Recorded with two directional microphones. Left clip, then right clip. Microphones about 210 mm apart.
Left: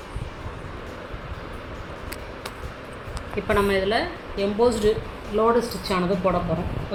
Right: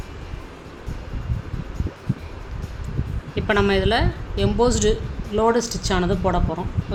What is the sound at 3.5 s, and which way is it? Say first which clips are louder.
A woman's voice: right 2 dB; 45° right (ahead or behind).